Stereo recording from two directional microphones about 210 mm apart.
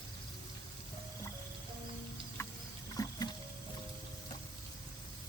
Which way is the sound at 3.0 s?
15° left (ahead or behind).